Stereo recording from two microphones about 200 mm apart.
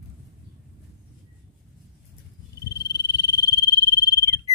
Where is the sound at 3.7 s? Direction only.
55° left (ahead or behind).